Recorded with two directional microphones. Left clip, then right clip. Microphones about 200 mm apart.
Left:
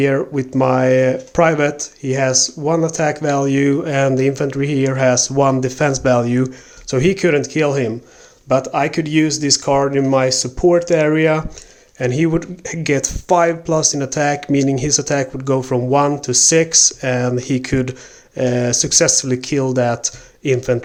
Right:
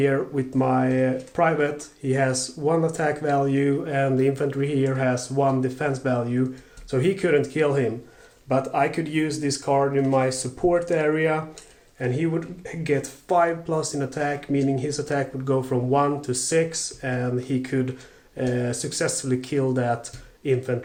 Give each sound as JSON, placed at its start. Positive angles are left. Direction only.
{"t": 0.0, "sound": "speech", "side_deg": 40}
{"t": 2.0, "sound": "speech", "side_deg": 35}
{"t": 10.0, "sound": "speech", "side_deg": 40}